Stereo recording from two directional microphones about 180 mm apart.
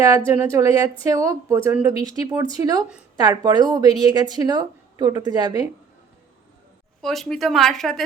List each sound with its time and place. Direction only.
0.3 s a woman's voice: 20° right (ahead or behind)
7.0 s speech: centre (ahead or behind)